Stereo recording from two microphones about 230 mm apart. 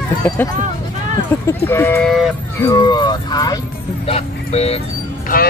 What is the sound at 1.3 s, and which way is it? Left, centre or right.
Speech, centre.